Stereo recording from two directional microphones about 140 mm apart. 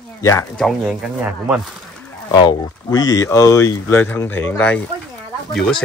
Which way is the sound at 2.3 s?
30° left (ahead or behind).